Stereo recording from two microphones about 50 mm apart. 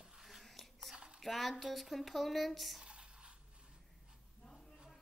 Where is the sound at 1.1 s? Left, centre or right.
Centre.